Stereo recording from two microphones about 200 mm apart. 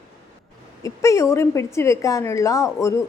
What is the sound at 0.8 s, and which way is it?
A woman's voice, 15° left (ahead or behind).